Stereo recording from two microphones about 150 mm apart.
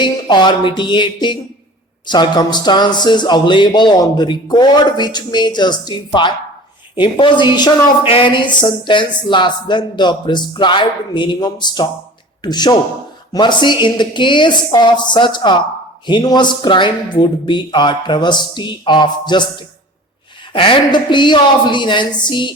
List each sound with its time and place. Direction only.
0.0 s speech: 30° left (ahead or behind)
2.0 s a sound: 30° left (ahead or behind)
7.0 s a man's voice: 30° left (ahead or behind)
20.5 s speech: 35° left (ahead or behind)